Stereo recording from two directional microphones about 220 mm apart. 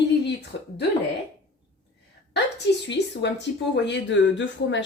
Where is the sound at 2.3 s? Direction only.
50° left (ahead or behind).